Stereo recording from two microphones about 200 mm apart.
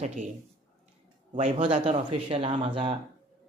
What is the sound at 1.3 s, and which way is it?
Speech, 30° right (ahead or behind).